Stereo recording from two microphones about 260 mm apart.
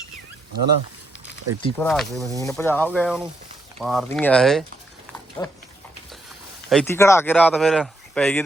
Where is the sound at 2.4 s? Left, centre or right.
Centre.